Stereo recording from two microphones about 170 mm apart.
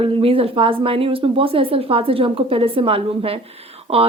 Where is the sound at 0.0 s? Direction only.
35° right (ahead or behind).